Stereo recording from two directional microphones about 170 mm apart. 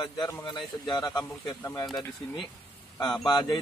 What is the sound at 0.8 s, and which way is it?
A man's voice, 25° left (ahead or behind).